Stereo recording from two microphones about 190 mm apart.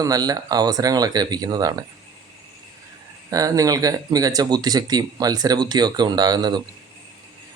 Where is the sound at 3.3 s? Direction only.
20° right (ahead or behind).